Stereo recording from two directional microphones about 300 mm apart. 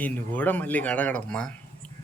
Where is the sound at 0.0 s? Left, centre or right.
Centre.